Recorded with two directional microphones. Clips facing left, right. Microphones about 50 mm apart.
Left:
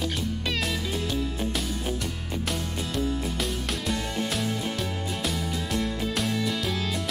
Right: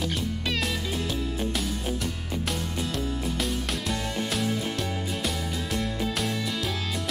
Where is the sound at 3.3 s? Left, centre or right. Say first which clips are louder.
Right 1 dB; centre.